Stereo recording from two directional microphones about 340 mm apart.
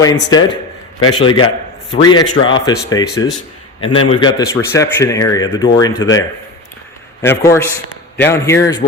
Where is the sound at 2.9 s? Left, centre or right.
Centre.